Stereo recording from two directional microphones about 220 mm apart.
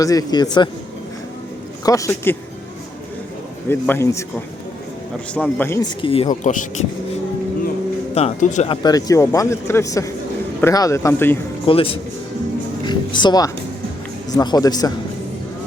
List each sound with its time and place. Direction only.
0.0 s speech: 15° left (ahead or behind)
1.8 s speech: 15° left (ahead or behind)
3.7 s speech: 10° left (ahead or behind)
5.3 s speech: 5° left (ahead or behind)
6.0 s speech: 25° left (ahead or behind)
8.1 s speech: 30° left (ahead or behind); by 11.3 s 10° left (ahead or behind)
11.6 s a man's voice: 25° left (ahead or behind)